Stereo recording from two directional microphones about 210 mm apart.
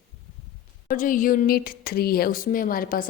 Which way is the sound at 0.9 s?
40° left (ahead or behind).